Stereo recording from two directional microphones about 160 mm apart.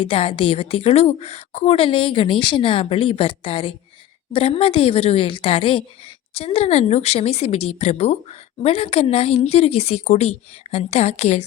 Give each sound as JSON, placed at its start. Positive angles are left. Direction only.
{"t": 0.0, "sound": "a woman's voice", "side_deg": 35}